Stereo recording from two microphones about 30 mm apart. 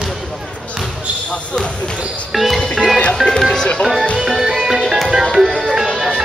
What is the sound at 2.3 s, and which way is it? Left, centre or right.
Music, centre.